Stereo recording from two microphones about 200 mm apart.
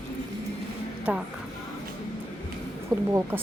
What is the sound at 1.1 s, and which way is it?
Speech, 5° right (ahead or behind).